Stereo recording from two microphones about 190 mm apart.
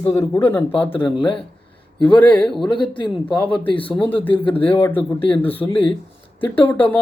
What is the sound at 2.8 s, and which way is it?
Speech, 25° left (ahead or behind).